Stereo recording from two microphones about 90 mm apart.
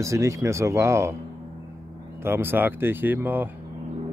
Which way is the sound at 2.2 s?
25° right (ahead or behind).